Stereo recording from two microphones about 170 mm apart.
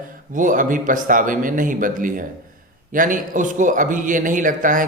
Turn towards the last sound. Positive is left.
turn(degrees=-50)  # may be behind; listen again after turning